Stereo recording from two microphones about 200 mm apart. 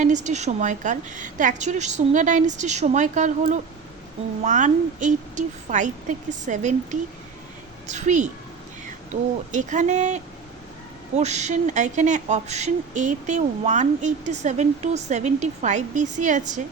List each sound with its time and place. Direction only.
0.0 s speech: 35° right (ahead or behind)
9.5 s speech: 40° right (ahead or behind)
11.2 s speech: 35° right (ahead or behind)